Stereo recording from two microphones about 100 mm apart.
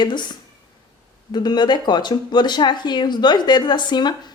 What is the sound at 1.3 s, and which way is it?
Speech, 45° left (ahead or behind).